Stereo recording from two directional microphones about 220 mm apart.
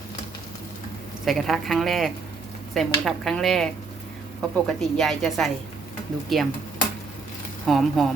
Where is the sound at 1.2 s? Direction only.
Centre (ahead or behind).